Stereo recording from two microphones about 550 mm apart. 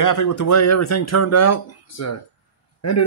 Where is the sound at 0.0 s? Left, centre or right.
Left.